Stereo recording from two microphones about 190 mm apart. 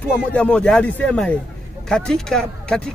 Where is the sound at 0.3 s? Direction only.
5° left (ahead or behind).